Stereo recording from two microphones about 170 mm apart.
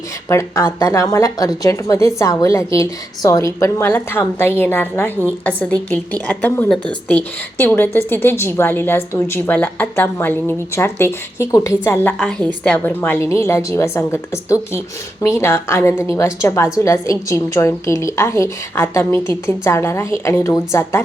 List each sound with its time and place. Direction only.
0.3 s a woman's voice: 15° left (ahead or behind)
15.2 s a woman's voice: 15° left (ahead or behind)